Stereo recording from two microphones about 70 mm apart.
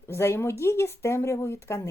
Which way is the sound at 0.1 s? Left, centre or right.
Left.